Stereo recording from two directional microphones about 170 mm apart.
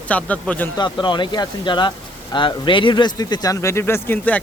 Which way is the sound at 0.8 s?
25° left (ahead or behind).